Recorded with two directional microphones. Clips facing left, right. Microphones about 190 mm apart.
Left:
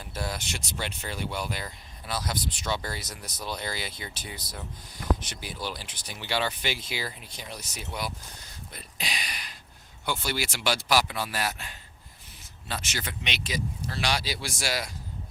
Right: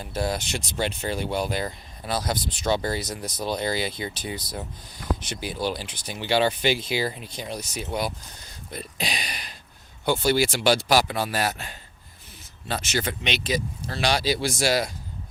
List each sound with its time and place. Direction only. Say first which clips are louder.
0.0 s speech: right 7 dB; 30° right (ahead or behind)
2.3 s speech: right 8 dB; 25° right (ahead or behind)
3.4 s speech: right 8 dB; 25° right (ahead or behind)
8.7 s speech: right 7 dB; 35° right (ahead or behind)